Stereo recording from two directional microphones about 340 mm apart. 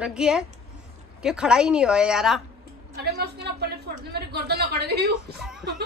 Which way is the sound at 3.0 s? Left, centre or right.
Right.